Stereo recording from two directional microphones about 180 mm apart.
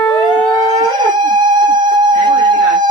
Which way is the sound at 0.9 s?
25° right (ahead or behind).